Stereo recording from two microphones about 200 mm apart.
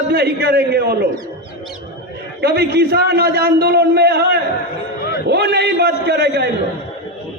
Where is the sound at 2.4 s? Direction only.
55° right (ahead or behind).